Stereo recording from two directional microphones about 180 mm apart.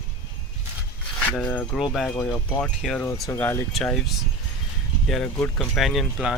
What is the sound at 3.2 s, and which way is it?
Speech, 15° left (ahead or behind).